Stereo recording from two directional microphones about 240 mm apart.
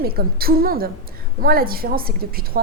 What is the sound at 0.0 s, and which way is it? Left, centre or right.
A woman's voice, right.